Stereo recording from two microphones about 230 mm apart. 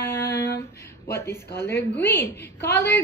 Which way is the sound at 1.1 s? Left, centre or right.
Centre.